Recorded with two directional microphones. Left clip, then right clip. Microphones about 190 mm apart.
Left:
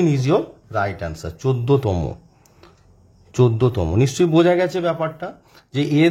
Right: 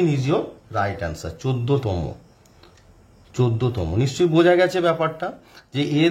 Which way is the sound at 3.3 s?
25° left (ahead or behind).